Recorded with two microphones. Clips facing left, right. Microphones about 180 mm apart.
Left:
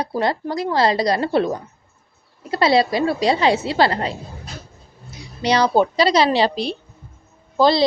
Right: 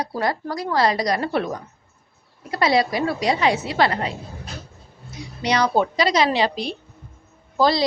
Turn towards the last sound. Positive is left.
turn(degrees=25)  # may be behind; listen again after turning